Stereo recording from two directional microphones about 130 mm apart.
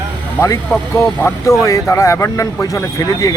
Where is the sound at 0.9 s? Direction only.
20° left (ahead or behind).